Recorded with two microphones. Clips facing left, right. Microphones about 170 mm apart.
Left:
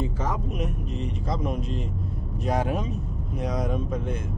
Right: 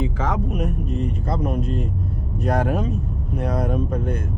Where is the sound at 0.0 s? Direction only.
90° right.